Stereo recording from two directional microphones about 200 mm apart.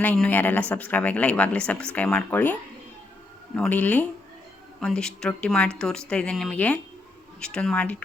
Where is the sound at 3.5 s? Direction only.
10° left (ahead or behind).